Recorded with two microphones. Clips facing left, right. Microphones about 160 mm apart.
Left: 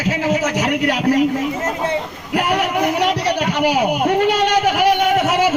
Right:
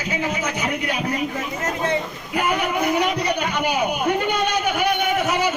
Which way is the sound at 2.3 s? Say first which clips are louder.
Left 4 dB; 80° left.